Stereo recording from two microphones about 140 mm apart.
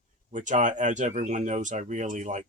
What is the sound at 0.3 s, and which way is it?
Speech, 60° right (ahead or behind).